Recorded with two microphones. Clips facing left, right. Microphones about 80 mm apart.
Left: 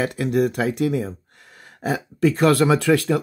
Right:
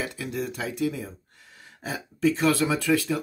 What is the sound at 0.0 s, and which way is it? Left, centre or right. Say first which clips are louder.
Speech: left 10 dB; left.